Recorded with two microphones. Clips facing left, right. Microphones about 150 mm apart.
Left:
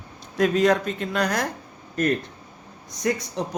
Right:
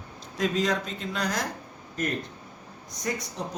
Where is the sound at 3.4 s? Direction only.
70° left (ahead or behind).